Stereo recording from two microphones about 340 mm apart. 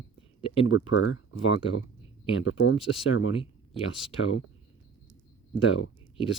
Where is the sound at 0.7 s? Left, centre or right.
Left.